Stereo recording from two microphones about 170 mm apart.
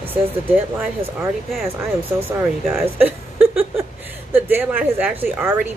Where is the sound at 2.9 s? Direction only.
10° right (ahead or behind).